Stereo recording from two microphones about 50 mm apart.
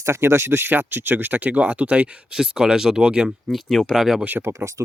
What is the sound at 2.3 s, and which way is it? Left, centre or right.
Speech, centre.